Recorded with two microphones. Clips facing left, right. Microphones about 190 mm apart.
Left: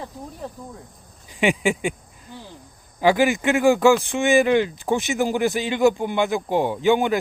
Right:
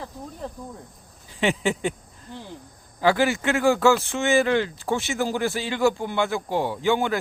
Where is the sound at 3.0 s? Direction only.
15° left (ahead or behind).